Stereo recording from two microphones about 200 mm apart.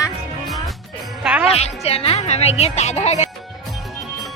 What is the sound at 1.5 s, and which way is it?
Speech, 30° left (ahead or behind).